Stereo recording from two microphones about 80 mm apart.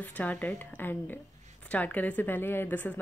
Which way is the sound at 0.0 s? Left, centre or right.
Left.